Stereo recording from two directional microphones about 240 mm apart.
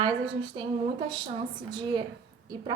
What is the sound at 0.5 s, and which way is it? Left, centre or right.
A woman's voice, centre.